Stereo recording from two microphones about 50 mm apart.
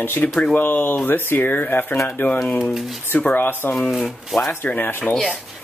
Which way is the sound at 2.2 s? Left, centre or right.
Left.